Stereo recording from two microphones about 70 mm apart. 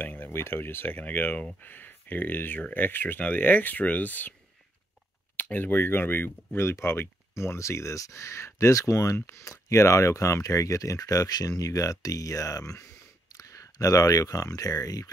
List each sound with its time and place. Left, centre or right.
0.0 s speech: left
5.3 s speech: left